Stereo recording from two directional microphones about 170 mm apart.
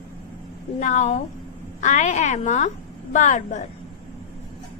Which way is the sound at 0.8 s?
45° left (ahead or behind).